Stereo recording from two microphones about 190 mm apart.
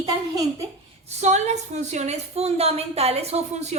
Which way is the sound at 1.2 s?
35° right (ahead or behind).